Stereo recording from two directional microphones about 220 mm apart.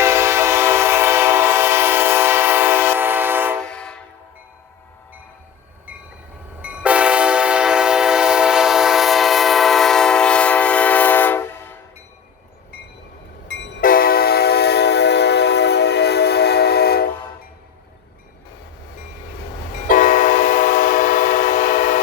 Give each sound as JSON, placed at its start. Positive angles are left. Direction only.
{"t": 0.0, "sound": "train", "side_deg": -10}
{"t": 3.7, "sound": "train", "side_deg": 5}
{"t": 6.6, "sound": "train", "side_deg": -5}
{"t": 13.5, "sound": "train", "side_deg": 55}
{"t": 13.8, "sound": "train", "side_deg": 40}
{"t": 19.7, "sound": "train", "side_deg": 35}